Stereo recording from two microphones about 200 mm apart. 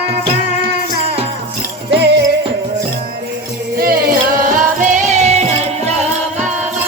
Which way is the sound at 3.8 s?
50° right (ahead or behind).